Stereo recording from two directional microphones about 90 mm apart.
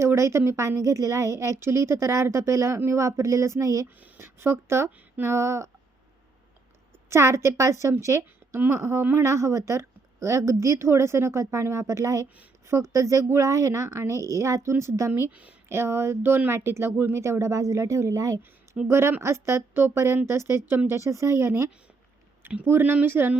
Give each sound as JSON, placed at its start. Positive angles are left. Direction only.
{"t": 0.0, "sound": "speech", "side_deg": -30}
{"t": 3.8, "sound": "speech", "side_deg": -25}
{"t": 7.1, "sound": "speech", "side_deg": -30}
{"t": 15.3, "sound": "speech", "side_deg": -15}
{"t": 15.7, "sound": "speech", "side_deg": -30}